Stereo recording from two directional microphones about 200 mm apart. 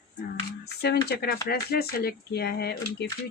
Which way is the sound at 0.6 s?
55° left (ahead or behind).